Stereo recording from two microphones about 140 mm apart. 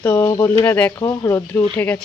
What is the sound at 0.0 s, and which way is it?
Speech, 15° left (ahead or behind).